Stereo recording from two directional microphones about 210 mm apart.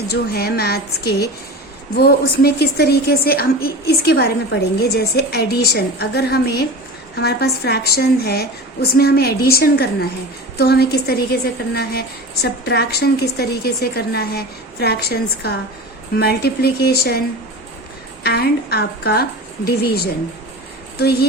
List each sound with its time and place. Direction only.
0.1 s a woman's voice: 50° left (ahead or behind)